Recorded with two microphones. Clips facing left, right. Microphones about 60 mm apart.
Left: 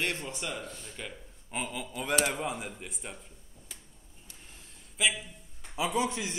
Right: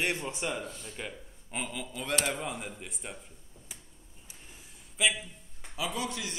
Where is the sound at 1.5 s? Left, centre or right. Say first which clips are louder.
Left 1 dB; centre.